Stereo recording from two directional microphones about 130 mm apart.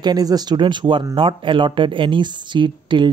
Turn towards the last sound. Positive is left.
turn(degrees=-40)  # may be behind; listen again after turning